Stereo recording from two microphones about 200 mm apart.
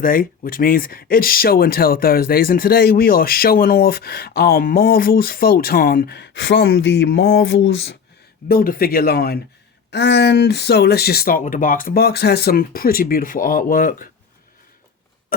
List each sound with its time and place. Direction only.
0.0 s speech: 45° left (ahead or behind); by 7.9 s 65° left (ahead or behind)
8.4 s speech: 45° left (ahead or behind)